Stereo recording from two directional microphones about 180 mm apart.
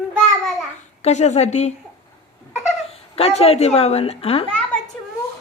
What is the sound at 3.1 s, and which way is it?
A woman's voice, 35° left (ahead or behind).